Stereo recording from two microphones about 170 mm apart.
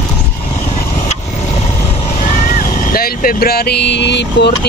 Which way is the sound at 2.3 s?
50° left (ahead or behind).